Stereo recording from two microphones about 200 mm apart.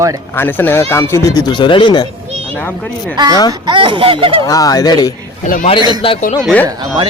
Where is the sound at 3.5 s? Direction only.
25° right (ahead or behind).